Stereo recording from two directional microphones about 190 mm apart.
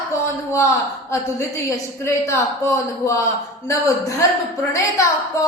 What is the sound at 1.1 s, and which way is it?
A woman's voice, 15° left (ahead or behind).